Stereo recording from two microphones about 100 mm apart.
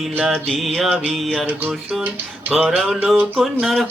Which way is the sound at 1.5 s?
20° right (ahead or behind).